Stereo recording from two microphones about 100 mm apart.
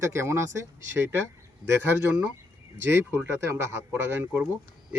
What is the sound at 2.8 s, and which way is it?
Speech, 20° right (ahead or behind).